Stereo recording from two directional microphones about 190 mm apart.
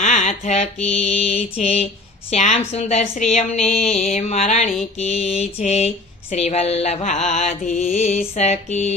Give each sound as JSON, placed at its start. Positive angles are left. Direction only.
{"t": 0.0, "sound": "a woman's voice", "side_deg": 40}